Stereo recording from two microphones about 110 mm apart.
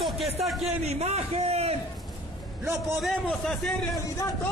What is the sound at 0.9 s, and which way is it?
Speech, 75° right (ahead or behind).